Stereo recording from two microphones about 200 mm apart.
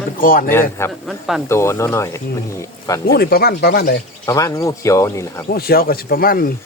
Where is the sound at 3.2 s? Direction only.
50° left (ahead or behind).